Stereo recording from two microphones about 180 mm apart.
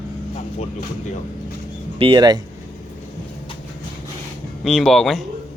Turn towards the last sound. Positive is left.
turn(degrees=0)  # may be behind; listen again after turning